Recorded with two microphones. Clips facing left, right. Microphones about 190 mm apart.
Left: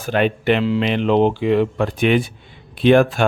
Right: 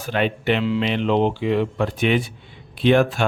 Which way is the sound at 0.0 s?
50° left (ahead or behind).